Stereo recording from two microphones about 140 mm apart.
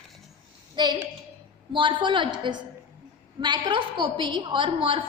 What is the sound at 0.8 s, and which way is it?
A woman's voice, 30° right (ahead or behind).